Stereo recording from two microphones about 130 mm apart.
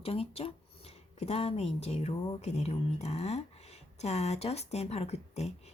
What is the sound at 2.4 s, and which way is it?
Speech, 60° left (ahead or behind).